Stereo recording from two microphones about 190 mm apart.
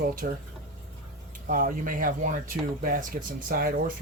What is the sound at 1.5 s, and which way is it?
Speech, 45° right (ahead or behind).